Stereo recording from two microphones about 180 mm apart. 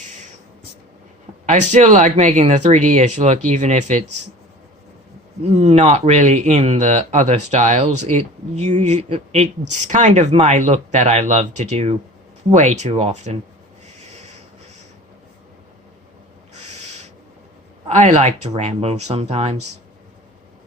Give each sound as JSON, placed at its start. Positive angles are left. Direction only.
{"t": 0.0, "sound": "a sound", "side_deg": -45}
{"t": 1.5, "sound": "speech", "side_deg": -40}
{"t": 5.5, "sound": "speech", "side_deg": -35}
{"t": 16.6, "sound": "owl", "side_deg": -40}
{"t": 17.8, "sound": "speech", "side_deg": -40}